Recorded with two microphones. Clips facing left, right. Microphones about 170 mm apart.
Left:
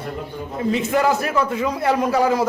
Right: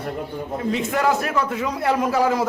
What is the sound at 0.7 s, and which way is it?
Speech, centre (ahead or behind).